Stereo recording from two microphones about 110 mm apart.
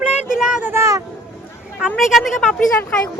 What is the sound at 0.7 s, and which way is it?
Speech, 25° right (ahead or behind).